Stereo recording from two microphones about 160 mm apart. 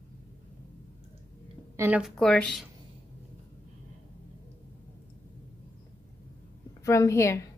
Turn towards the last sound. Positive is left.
turn(degrees=20)  # may be behind; listen again after turning